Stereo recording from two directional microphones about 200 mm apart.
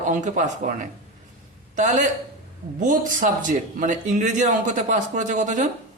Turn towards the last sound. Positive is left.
turn(degrees=-40)  # may be behind; listen again after turning